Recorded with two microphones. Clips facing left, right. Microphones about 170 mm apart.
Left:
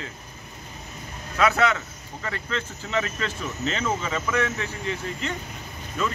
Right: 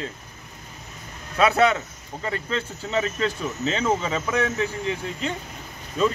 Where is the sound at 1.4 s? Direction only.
30° right (ahead or behind).